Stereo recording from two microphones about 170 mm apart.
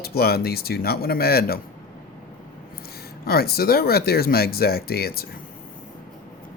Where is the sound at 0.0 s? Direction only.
65° left (ahead or behind).